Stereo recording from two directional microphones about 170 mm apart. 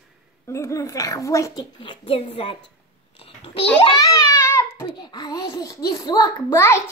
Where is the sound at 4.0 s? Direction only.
20° left (ahead or behind).